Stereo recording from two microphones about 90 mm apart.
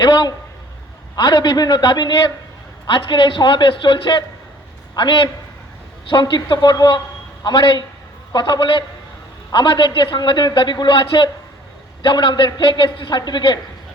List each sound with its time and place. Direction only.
0.0 s a man's voice: 50° left (ahead or behind)